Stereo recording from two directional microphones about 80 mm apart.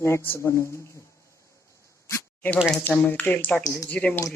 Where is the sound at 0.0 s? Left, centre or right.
Left.